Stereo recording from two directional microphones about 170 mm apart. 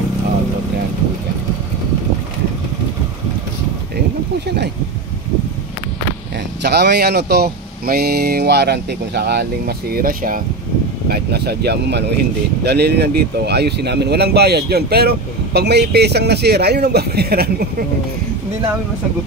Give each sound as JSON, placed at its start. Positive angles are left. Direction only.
{"t": 6.6, "sound": "speech", "side_deg": -75}
{"t": 11.1, "sound": "speech", "side_deg": -70}